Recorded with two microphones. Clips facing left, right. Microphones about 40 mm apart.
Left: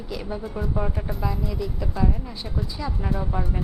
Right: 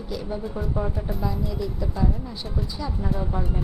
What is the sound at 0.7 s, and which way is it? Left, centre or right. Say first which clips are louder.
Speech: even; centre.